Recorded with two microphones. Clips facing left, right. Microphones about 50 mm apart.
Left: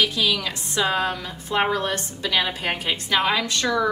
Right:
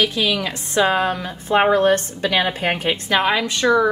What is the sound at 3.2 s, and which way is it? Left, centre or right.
Speech, centre.